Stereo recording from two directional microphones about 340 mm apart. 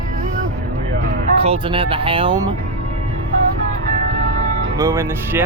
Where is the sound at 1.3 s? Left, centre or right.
Centre.